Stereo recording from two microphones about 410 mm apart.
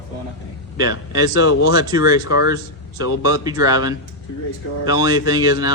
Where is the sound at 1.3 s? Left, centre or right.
Left.